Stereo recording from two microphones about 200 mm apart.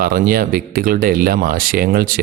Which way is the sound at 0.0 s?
45° right (ahead or behind).